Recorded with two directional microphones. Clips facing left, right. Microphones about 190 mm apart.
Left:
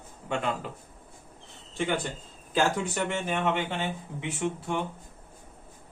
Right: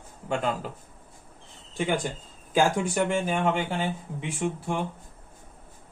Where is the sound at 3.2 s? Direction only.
10° right (ahead or behind).